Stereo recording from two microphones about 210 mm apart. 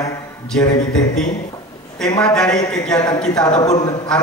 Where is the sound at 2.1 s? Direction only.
20° left (ahead or behind).